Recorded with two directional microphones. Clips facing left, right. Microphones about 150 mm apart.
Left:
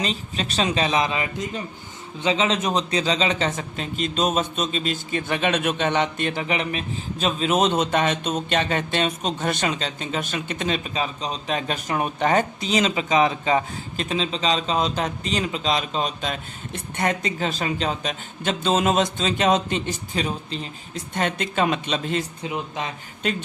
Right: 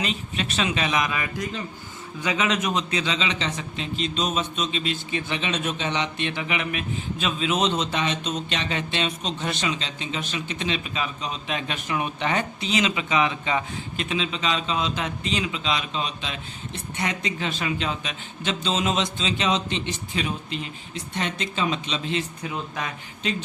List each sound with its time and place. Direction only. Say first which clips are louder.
0.0 s a man's voice: left 1 dB; 35° left (ahead or behind)
21.1 s a man's voice: left 4 dB; 50° left (ahead or behind)
22.4 s speech: left 2 dB; 20° left (ahead or behind)